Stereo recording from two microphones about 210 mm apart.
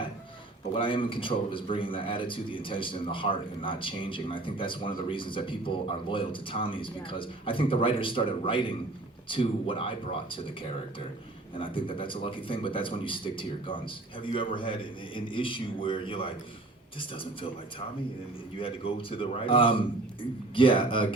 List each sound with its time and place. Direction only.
0.7 s a man's voice: 25° left (ahead or behind)
11.6 s a man's voice: 25° left (ahead or behind)